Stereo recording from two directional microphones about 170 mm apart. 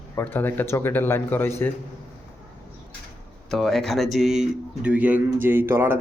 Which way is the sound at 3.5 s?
Centre (ahead or behind).